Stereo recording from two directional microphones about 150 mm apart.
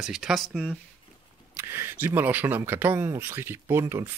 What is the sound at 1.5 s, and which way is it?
Speech, 15° right (ahead or behind).